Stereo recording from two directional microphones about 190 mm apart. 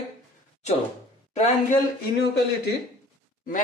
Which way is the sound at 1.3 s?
35° left (ahead or behind).